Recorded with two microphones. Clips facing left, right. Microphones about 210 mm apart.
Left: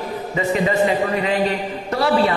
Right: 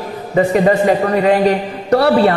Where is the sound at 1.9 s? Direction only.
65° right (ahead or behind).